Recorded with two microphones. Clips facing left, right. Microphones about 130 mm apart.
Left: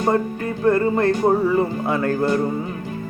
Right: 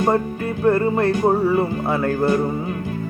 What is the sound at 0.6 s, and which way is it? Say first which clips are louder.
Speech: even; 35° right (ahead or behind).